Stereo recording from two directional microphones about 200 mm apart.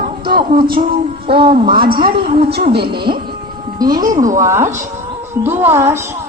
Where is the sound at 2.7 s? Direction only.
50° right (ahead or behind).